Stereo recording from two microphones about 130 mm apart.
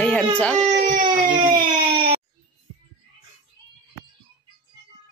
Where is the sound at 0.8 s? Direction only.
90° right.